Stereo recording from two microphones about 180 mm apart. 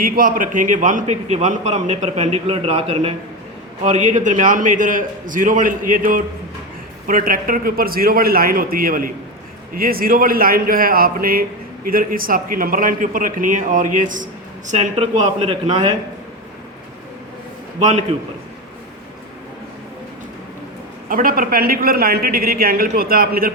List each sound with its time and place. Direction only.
0.0 s a man's voice: 50° right (ahead or behind)
14.7 s a man's voice: 35° right (ahead or behind)
17.7 s a man's voice: 40° right (ahead or behind)
21.1 s speech: 50° right (ahead or behind)